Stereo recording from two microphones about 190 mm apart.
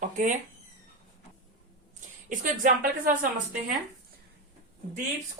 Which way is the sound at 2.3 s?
45° right (ahead or behind).